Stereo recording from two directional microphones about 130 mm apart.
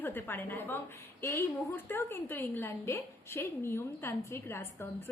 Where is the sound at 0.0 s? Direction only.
15° left (ahead or behind).